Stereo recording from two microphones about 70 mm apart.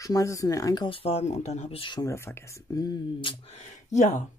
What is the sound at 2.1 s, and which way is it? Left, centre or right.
Speech, left.